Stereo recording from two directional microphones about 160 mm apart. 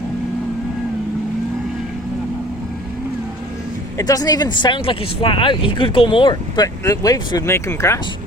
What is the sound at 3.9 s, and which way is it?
Speech, 25° left (ahead or behind).